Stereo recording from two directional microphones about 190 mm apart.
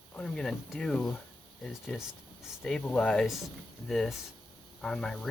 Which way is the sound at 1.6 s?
5° left (ahead or behind).